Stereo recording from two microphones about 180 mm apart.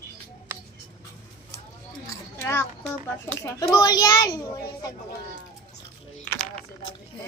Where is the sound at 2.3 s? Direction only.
15° left (ahead or behind).